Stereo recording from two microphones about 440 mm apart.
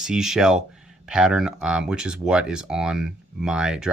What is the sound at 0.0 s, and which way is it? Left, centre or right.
Speech, centre.